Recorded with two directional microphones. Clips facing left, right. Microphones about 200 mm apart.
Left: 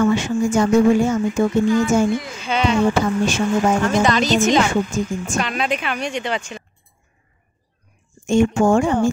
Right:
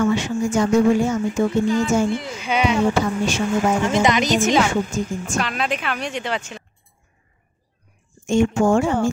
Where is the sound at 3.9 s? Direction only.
20° right (ahead or behind).